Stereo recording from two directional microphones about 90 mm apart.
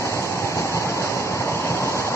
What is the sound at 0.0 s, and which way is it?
Train, 30° left (ahead or behind).